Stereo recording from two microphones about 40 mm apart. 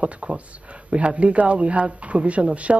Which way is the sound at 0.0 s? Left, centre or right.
Right.